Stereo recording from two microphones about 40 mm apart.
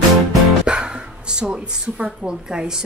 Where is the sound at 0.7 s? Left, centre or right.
Right.